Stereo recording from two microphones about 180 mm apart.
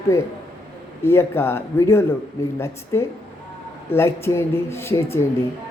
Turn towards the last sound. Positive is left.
turn(degrees=15)  # may be behind; listen again after turning